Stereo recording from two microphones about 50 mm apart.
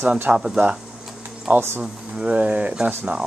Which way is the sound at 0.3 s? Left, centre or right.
Right.